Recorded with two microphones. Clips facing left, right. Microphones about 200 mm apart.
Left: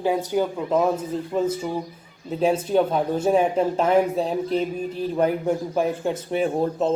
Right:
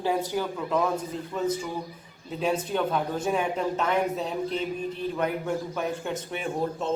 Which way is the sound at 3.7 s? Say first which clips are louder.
Left 7 dB; 30° left (ahead or behind).